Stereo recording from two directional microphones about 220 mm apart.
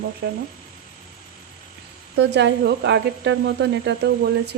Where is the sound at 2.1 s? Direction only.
50° right (ahead or behind).